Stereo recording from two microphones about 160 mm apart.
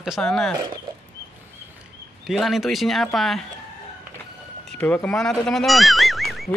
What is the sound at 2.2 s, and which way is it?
Speech, centre (ahead or behind).